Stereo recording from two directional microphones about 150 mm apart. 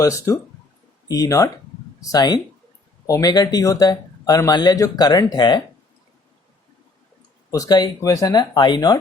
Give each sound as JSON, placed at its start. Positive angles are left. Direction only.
{"t": 0.0, "sound": "speech", "side_deg": 20}
{"t": 7.5, "sound": "speech", "side_deg": 25}